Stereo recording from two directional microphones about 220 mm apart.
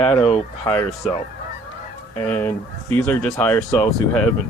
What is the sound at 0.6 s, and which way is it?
Speech, 5° left (ahead or behind).